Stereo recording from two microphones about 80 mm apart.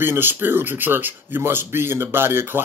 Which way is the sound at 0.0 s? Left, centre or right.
Right.